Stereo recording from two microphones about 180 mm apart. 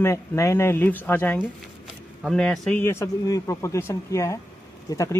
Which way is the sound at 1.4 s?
Centre (ahead or behind).